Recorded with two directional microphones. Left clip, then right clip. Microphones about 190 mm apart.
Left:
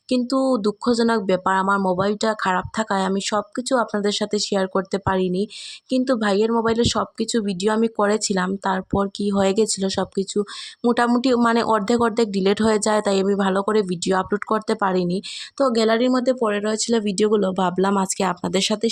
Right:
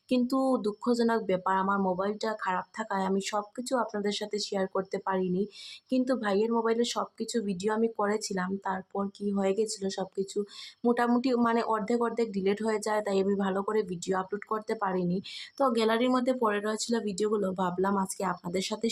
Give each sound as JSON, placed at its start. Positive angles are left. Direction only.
{"t": 0.1, "sound": "speech", "side_deg": 35}